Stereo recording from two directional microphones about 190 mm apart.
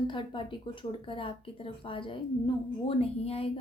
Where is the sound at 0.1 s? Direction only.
25° left (ahead or behind).